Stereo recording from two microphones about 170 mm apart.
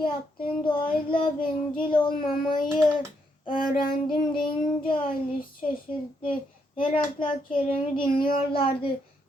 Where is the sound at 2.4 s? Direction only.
55° left (ahead or behind).